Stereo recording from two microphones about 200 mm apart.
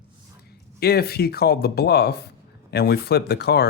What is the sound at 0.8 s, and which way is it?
Speech, 50° left (ahead or behind).